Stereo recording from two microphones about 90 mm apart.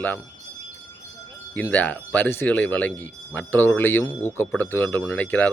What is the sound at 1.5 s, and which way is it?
Speech, 15° left (ahead or behind).